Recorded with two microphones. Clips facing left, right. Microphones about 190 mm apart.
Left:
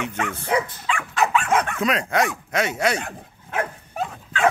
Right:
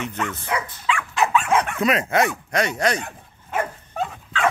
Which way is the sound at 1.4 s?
5° right (ahead or behind).